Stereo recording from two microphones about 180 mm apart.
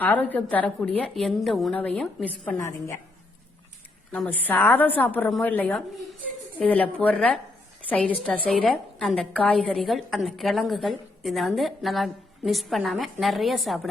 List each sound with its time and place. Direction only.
0.0 s a woman's voice: 10° left (ahead or behind)
4.1 s a woman's voice: 10° left (ahead or behind)